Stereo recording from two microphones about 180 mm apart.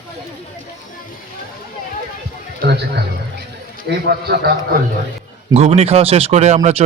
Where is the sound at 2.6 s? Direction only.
60° right (ahead or behind).